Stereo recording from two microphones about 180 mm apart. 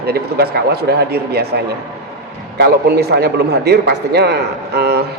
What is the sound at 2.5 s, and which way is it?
A man's voice, 65° right (ahead or behind).